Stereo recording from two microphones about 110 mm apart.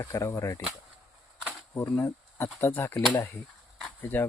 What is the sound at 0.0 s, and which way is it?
Speech, 30° left (ahead or behind).